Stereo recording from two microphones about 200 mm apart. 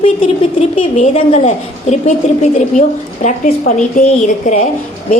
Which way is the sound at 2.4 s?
35° left (ahead or behind).